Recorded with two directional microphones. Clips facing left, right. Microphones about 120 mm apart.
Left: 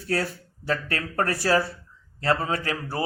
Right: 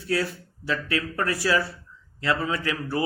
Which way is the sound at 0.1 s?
45° left (ahead or behind).